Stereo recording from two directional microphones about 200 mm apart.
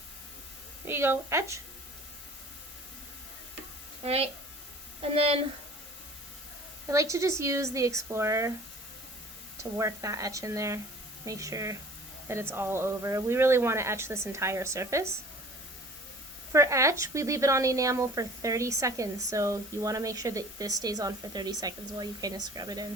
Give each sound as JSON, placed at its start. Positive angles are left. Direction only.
{"t": 0.9, "sound": "speech", "side_deg": -10}
{"t": 4.0, "sound": "a woman's voice", "side_deg": -30}
{"t": 6.8, "sound": "speech", "side_deg": -15}
{"t": 9.6, "sound": "speech", "side_deg": -15}
{"t": 16.5, "sound": "speech", "side_deg": -15}